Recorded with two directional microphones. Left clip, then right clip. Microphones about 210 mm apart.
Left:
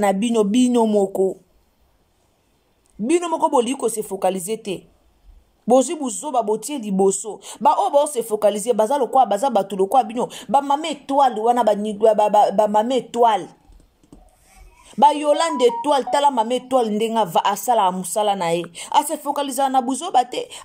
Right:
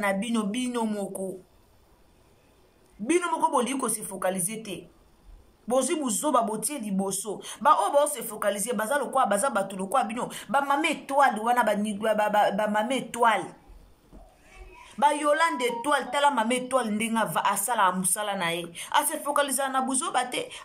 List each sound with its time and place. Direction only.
0.0 s a man's voice: 35° left (ahead or behind)
3.1 s a man's voice: 30° left (ahead or behind)
14.9 s a man's voice: 35° left (ahead or behind)